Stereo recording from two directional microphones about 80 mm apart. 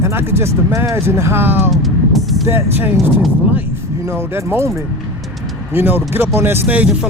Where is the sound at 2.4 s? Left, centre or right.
Right.